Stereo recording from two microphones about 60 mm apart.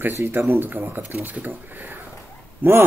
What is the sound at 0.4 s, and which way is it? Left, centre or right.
Speech, right.